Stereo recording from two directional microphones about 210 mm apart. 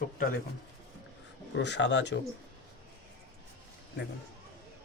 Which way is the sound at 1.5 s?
55° left (ahead or behind).